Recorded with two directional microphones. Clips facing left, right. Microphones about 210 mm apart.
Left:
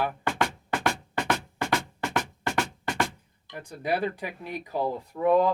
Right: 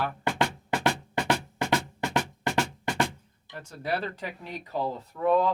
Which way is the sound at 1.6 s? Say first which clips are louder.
Right 1 dB; 20° right (ahead or behind).